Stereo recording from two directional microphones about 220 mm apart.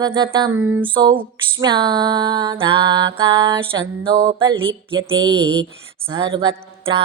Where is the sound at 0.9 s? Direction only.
20° right (ahead or behind).